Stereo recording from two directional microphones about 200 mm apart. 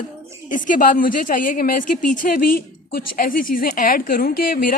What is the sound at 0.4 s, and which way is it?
A woman's voice, 40° left (ahead or behind).